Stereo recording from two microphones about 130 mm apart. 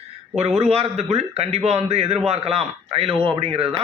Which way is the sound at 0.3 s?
55° right (ahead or behind).